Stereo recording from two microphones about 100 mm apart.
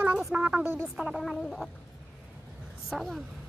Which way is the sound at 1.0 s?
Centre (ahead or behind).